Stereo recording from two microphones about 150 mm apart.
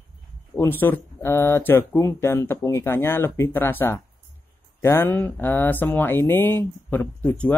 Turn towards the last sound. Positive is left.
turn(degrees=10)  # may be behind; listen again after turning